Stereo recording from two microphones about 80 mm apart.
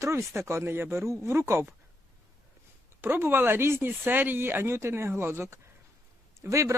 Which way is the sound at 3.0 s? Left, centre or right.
Right.